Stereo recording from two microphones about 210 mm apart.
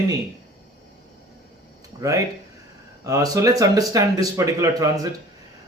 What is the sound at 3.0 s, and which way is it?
A man's voice, 15° right (ahead or behind).